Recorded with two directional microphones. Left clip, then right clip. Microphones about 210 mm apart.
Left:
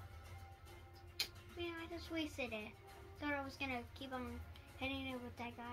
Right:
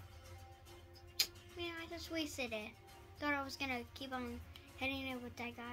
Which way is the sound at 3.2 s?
45° right (ahead or behind).